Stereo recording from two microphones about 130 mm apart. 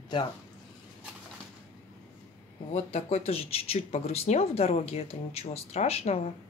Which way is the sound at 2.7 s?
55° left (ahead or behind).